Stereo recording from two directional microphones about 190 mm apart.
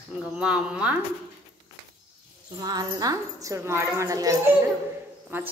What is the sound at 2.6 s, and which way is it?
A woman's voice, 20° right (ahead or behind).